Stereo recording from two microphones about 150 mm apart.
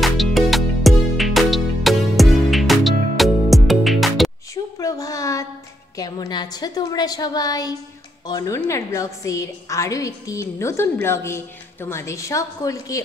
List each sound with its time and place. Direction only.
0.0 s music: centre (ahead or behind)
4.7 s a sound: 25° left (ahead or behind)
5.9 s a woman's voice: 25° left (ahead or behind)